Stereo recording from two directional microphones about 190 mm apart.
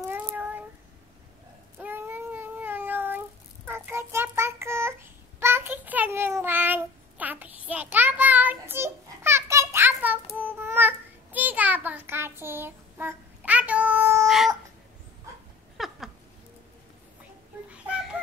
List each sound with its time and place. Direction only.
0.1 s child singing: 10° right (ahead or behind)
1.8 s child singing: 10° right (ahead or behind)
10.4 s babbling: 10° right (ahead or behind)
14.2 s a sound: centre (ahead or behind)
15.3 s dog: 15° right (ahead or behind)
15.8 s a sound: centre (ahead or behind)